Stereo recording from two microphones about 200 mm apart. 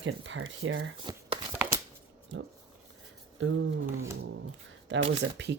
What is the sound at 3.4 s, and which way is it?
Speech, 70° right (ahead or behind).